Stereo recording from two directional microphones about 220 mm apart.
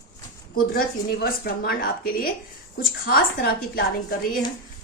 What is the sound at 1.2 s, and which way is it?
A woman's voice, 45° left (ahead or behind).